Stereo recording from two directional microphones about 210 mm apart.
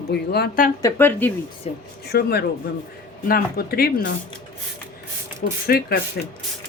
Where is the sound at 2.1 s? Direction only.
50° left (ahead or behind).